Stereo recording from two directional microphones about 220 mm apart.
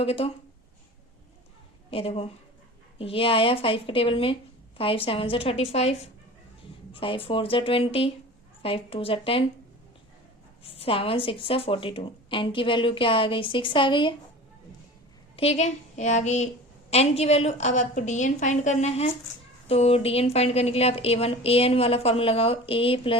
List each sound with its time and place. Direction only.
0.0 s a woman's voice: 25° left (ahead or behind)
1.9 s a woman's voice: 25° left (ahead or behind)
10.6 s a woman's voice: 25° left (ahead or behind)
15.4 s a woman's voice: 30° left (ahead or behind)